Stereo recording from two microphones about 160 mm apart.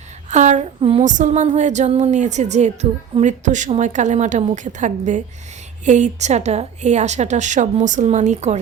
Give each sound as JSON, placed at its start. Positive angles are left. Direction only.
{"t": 0.3, "sound": "a woman's voice", "side_deg": -50}
{"t": 1.0, "sound": "a woman's voice", "side_deg": -50}